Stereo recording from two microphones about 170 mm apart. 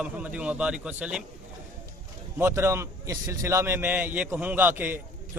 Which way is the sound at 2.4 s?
15° right (ahead or behind).